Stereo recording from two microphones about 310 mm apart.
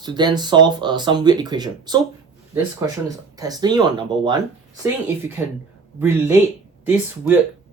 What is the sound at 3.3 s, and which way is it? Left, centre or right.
Speech, centre.